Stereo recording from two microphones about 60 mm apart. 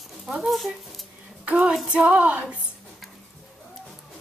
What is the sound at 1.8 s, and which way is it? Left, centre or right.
Music, centre.